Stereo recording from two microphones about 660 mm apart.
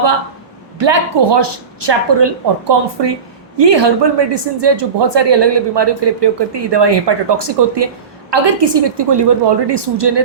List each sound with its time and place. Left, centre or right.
0.8 s speech: right